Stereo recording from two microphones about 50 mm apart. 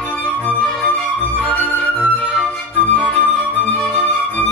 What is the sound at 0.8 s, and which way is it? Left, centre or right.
Flute, left.